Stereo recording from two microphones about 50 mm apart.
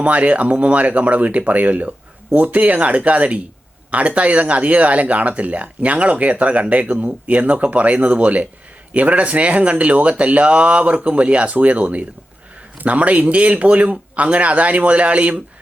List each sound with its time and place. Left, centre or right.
0.0 s speech: right